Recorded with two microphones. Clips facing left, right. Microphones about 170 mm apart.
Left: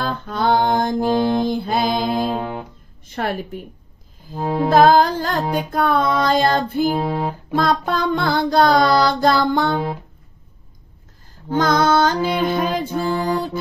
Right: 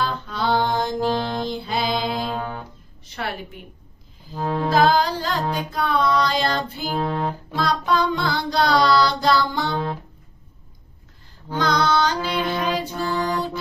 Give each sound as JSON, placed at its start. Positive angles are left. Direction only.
{"t": 0.0, "sound": "music", "side_deg": 50}
{"t": 1.5, "sound": "mantra", "side_deg": 50}
{"t": 2.3, "sound": "music", "side_deg": 15}
{"t": 3.2, "sound": "mantra", "side_deg": 45}
{"t": 4.4, "sound": "music", "side_deg": 10}
{"t": 4.6, "sound": "mantra", "side_deg": 50}
{"t": 7.0, "sound": "music", "side_deg": 15}
{"t": 7.5, "sound": "mantra", "side_deg": 50}
{"t": 11.4, "sound": "music", "side_deg": 45}